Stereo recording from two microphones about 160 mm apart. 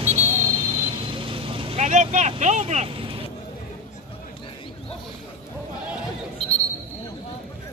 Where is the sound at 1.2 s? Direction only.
35° right (ahead or behind).